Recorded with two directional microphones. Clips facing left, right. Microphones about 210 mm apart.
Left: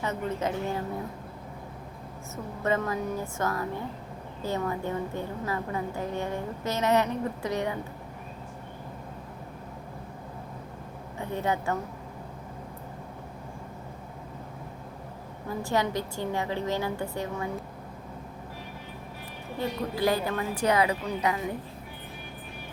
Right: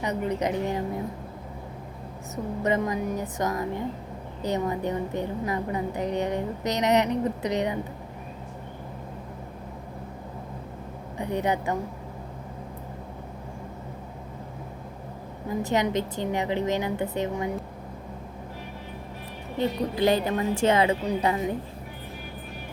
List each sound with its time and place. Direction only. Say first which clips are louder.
0.0 s a woman's voice: right 3 dB; 15° right (ahead or behind)
2.3 s a woman's voice: right 3 dB; 20° right (ahead or behind)
11.2 s a woman's voice: right 3 dB; 15° right (ahead or behind)
15.4 s a woman's voice: right 3 dB; 20° right (ahead or behind)
19.5 s a woman's voice: right 4 dB; 20° right (ahead or behind)